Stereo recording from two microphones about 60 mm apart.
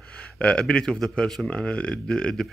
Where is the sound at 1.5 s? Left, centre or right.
Centre.